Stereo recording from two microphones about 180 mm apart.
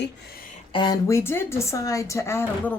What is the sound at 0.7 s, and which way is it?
A woman's voice, 25° left (ahead or behind).